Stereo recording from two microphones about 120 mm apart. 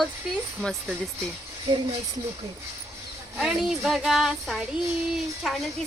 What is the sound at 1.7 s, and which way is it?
Speech, 50° right (ahead or behind).